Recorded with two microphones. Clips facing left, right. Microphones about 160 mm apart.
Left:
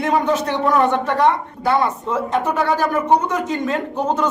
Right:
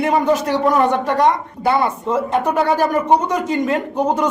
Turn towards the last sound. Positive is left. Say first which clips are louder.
# right 2 dB
turn(degrees=-15)  # may be behind; listen again after turning